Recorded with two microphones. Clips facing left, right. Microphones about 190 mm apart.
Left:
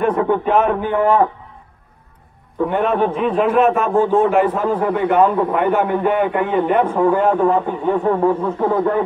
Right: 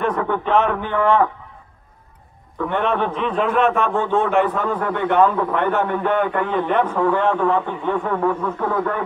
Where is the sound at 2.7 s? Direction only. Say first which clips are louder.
Left 3 dB; 10° left (ahead or behind).